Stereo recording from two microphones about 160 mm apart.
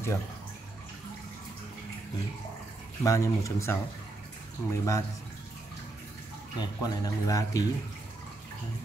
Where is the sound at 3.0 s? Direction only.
20° left (ahead or behind).